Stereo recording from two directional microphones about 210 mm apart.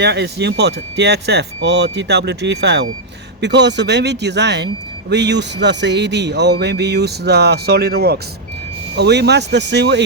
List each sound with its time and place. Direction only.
0.0 s speech: 50° right (ahead or behind)